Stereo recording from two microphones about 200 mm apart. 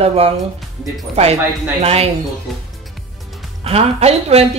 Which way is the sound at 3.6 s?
30° right (ahead or behind).